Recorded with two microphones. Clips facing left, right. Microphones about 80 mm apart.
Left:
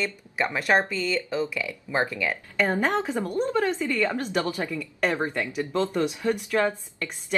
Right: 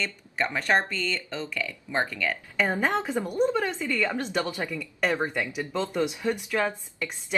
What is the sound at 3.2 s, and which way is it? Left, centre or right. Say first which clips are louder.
A woman's voice: right 2 dB; centre.